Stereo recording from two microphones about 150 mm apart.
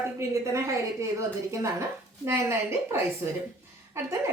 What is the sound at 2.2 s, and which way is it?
A woman's voice, 15° right (ahead or behind).